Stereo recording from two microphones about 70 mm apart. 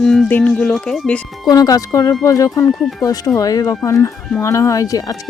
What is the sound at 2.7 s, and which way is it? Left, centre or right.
Speech, centre.